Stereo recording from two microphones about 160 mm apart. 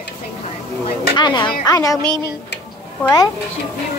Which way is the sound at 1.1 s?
25° left (ahead or behind).